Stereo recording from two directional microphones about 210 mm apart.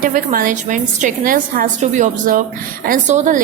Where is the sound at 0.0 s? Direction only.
40° right (ahead or behind).